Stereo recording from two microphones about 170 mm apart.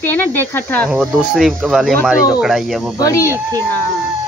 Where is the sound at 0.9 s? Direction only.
Centre (ahead or behind).